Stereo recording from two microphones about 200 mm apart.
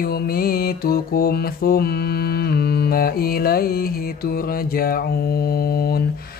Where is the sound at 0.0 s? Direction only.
50° left (ahead or behind).